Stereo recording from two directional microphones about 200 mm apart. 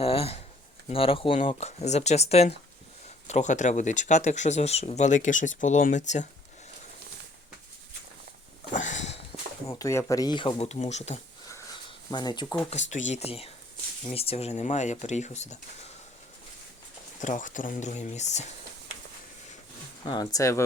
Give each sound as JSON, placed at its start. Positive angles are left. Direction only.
{"t": 0.0, "sound": "speech", "side_deg": 30}
{"t": 8.7, "sound": "sniff", "side_deg": 40}
{"t": 9.6, "sound": "speech", "side_deg": 15}
{"t": 11.9, "sound": "speech", "side_deg": 20}
{"t": 12.7, "sound": "speech", "side_deg": 35}
{"t": 17.2, "sound": "speech", "side_deg": 40}
{"t": 20.1, "sound": "speech", "side_deg": 20}